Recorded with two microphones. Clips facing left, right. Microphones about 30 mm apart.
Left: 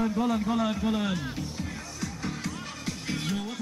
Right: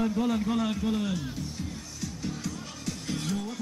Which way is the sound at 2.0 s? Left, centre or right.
Left.